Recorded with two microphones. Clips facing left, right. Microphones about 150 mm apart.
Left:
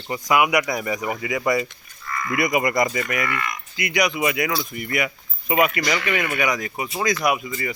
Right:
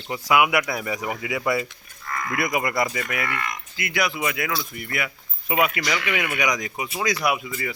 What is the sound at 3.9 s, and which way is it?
Speech, 15° left (ahead or behind).